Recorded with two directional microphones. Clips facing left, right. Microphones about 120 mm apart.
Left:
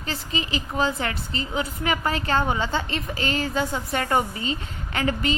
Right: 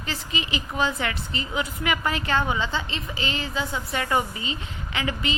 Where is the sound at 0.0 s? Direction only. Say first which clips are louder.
Left 2 dB; 35° left (ahead or behind).